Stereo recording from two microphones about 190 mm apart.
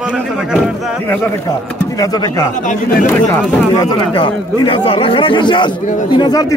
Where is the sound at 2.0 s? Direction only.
20° left (ahead or behind).